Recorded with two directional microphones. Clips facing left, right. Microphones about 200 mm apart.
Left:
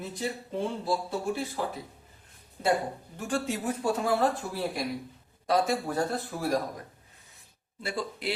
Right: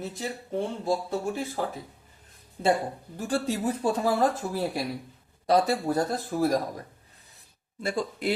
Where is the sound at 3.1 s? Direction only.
35° right (ahead or behind).